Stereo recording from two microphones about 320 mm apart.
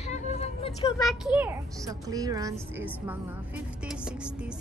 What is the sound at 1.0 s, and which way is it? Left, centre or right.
A child's voice, centre.